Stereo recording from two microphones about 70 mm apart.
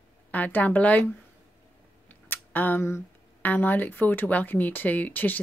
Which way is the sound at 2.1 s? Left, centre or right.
Left.